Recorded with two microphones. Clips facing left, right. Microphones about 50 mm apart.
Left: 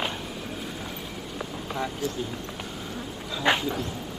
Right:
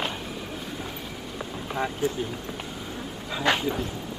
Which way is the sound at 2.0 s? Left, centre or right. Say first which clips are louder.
Right 7 dB; right.